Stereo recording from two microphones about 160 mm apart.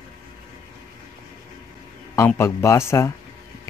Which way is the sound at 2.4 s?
20° left (ahead or behind).